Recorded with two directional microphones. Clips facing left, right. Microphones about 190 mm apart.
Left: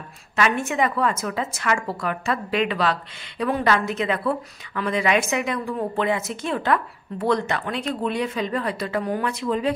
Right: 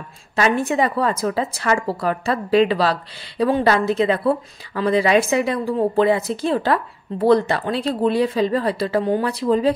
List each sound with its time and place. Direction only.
0.4 s a woman's voice: 35° right (ahead or behind)